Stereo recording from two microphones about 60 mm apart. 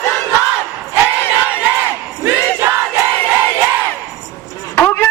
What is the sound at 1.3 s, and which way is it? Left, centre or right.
Crowd, right.